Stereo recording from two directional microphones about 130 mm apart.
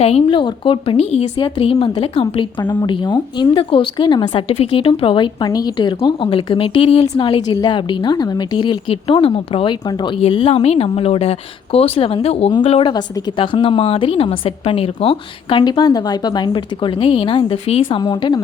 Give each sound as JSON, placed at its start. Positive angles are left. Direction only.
{"t": 0.0, "sound": "a woman's voice", "side_deg": 50}
{"t": 9.8, "sound": "a woman's voice", "side_deg": 35}
{"t": 10.2, "sound": "speech", "side_deg": 50}
{"t": 12.9, "sound": "a woman's voice", "side_deg": 40}